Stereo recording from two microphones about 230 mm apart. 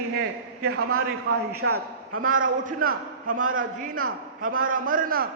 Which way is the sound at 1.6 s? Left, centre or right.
Right.